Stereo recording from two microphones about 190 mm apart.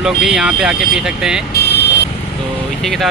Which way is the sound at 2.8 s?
Centre (ahead or behind).